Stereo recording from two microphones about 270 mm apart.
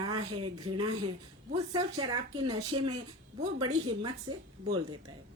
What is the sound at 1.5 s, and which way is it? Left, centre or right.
A woman's voice, centre.